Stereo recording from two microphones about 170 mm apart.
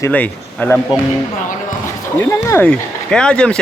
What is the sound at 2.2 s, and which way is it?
Speech, 15° left (ahead or behind).